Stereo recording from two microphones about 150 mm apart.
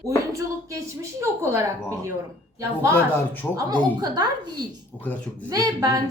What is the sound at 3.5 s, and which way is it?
Speech, 25° right (ahead or behind).